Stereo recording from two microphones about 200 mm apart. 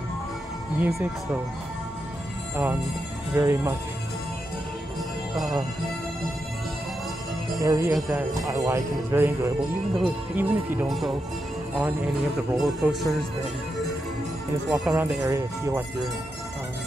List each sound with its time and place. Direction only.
0.7 s speech: 10° right (ahead or behind)
2.5 s speech: 10° right (ahead or behind)
5.3 s speech: centre (ahead or behind)
7.6 s speech: 15° right (ahead or behind)
7.9 s speech: centre (ahead or behind)
8.5 s speech: 15° right (ahead or behind); by 11.1 s centre (ahead or behind)
12.5 s speech: centre (ahead or behind)
14.7 s speech: 10° right (ahead or behind)